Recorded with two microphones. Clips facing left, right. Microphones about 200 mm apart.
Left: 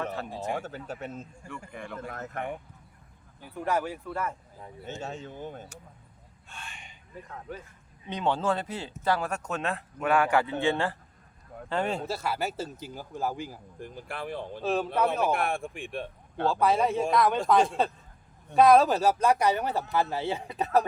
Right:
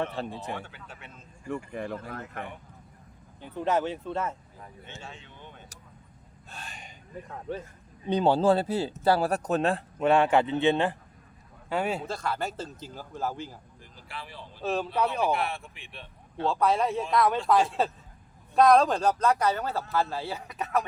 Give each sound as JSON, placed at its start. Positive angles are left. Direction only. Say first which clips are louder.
{"t": 0.5, "sound": "speech", "louder": "left 5 dB", "side_deg": 40}
{"t": 1.7, "sound": "speech", "louder": "right 3 dB", "side_deg": -35}
{"t": 2.1, "sound": "speech", "louder": "left 1 dB", "side_deg": 40}
{"t": 3.4, "sound": "speech", "louder": "right 2 dB", "side_deg": -20}
{"t": 4.9, "sound": "speech", "louder": "left 11 dB", "side_deg": 40}
{"t": 6.5, "sound": "gasp", "louder": "right 2 dB", "side_deg": -40}
{"t": 7.5, "sound": "speech", "louder": "right 6 dB", "side_deg": -30}
{"t": 11.7, "sound": "speech", "louder": "even", "side_deg": -5}
{"t": 12.0, "sound": "speech", "louder": "left 1 dB", "side_deg": 5}
{"t": 13.7, "sound": "speech", "louder": "left 9 dB", "side_deg": 55}
{"t": 14.6, "sound": "speech", "louder": "left 1 dB", "side_deg": 0}
{"t": 14.8, "sound": "speech", "louder": "even", "side_deg": 55}
{"t": 16.5, "sound": "speech", "louder": "left 1 dB", "side_deg": 0}